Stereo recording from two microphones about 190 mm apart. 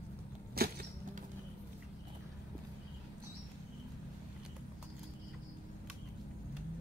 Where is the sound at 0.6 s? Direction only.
55° right (ahead or behind).